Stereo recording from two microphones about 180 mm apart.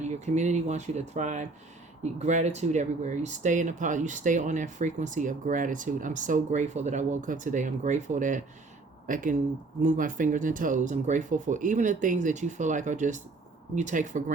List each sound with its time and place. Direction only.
0.0 s speech: 40° right (ahead or behind)